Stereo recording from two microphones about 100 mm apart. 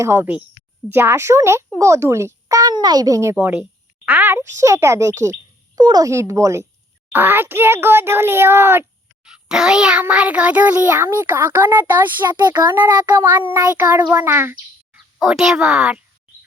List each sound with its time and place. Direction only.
0.0 s speech: 20° right (ahead or behind)
3.3 s a child's voice: 15° right (ahead or behind)
5.7 s speech: 40° right (ahead or behind); by 8.8 s 25° right (ahead or behind)
9.2 s a child's voice: 5° right (ahead or behind)
12.4 s a child's voice: 45° right (ahead or behind)
12.7 s speech: 20° right (ahead or behind)
14.9 s speech: 5° right (ahead or behind)